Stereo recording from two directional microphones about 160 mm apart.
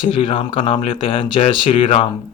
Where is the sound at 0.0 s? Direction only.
35° left (ahead or behind).